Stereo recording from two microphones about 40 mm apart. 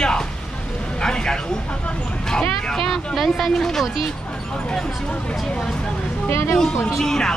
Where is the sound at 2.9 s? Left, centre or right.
Centre.